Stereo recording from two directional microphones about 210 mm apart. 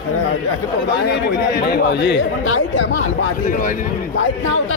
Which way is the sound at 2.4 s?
75° left (ahead or behind).